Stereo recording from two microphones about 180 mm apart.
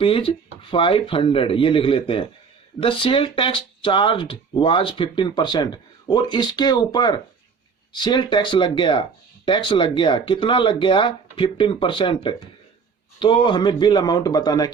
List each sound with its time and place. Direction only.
0.0 s speech: 30° left (ahead or behind)